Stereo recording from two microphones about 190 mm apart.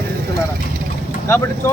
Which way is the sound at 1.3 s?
15° left (ahead or behind).